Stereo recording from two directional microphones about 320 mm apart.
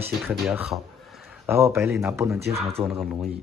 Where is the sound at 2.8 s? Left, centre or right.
Centre.